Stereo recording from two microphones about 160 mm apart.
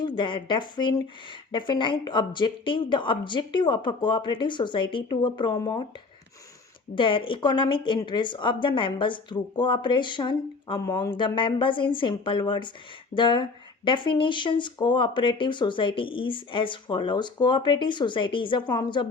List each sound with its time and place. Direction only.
0.0 s speech: 30° left (ahead or behind)
6.9 s speech: 30° left (ahead or behind)